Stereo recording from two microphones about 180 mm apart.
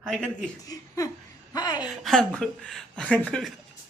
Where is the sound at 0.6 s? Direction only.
20° left (ahead or behind).